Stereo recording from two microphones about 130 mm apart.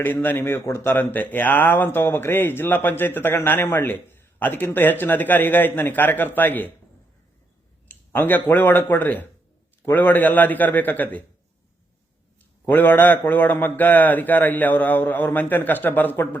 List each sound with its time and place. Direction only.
0.0 s a man's voice: 15° left (ahead or behind)
7.9 s a man's voice: 15° left (ahead or behind)
12.6 s a man's voice: 15° left (ahead or behind)